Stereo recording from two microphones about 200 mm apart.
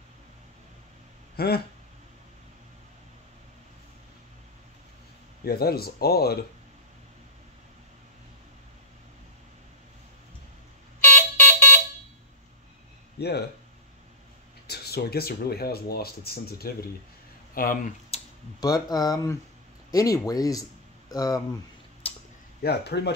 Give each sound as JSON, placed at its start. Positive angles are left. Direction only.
{"t": 1.3, "sound": "speech", "side_deg": 50}
{"t": 5.4, "sound": "speech", "side_deg": 50}
{"t": 11.0, "sound": "alarm", "side_deg": 10}
{"t": 13.2, "sound": "speech", "side_deg": 55}
{"t": 14.7, "sound": "speech", "side_deg": 50}
{"t": 18.6, "sound": "speech", "side_deg": 20}
{"t": 22.0, "sound": "a sound", "side_deg": 30}
{"t": 22.6, "sound": "speech", "side_deg": 55}